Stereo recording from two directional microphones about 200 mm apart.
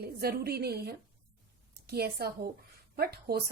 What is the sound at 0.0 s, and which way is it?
A woman's voice, 50° right (ahead or behind).